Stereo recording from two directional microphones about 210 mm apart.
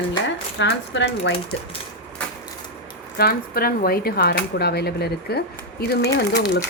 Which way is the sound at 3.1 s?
45° left (ahead or behind).